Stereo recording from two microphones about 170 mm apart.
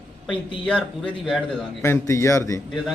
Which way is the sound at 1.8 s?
15° left (ahead or behind).